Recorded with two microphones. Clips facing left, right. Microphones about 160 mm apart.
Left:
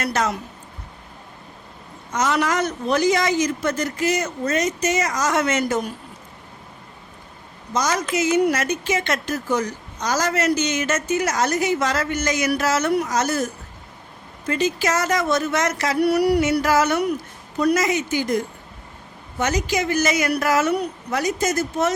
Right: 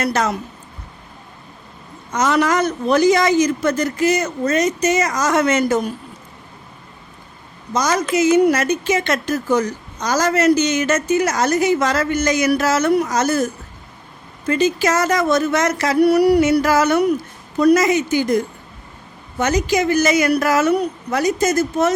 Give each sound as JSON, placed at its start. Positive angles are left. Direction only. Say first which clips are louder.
{"t": 0.1, "sound": "a woman's voice", "louder": "right 3 dB", "side_deg": -35}
{"t": 2.3, "sound": "a woman's voice", "louder": "right 6 dB", "side_deg": -40}
{"t": 7.9, "sound": "a woman's voice", "louder": "right 7 dB", "side_deg": -35}
{"t": 14.5, "sound": "a woman's voice", "louder": "right 4 dB", "side_deg": -40}
{"t": 19.4, "sound": "a woman's voice", "louder": "right 5 dB", "side_deg": -40}